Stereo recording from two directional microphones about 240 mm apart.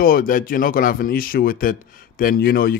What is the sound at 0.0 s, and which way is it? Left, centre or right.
Speech, left.